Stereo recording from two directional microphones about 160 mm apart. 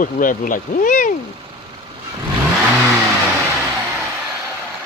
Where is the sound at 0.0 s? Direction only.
55° left (ahead or behind).